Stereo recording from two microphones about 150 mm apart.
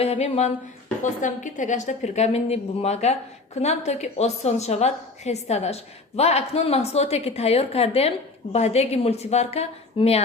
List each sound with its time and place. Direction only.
0.0 s a woman's voice: 40° left (ahead or behind)
1.0 s a woman's voice: 55° left (ahead or behind)